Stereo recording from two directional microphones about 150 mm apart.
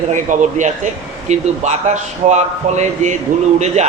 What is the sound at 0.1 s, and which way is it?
Speech, 55° right (ahead or behind).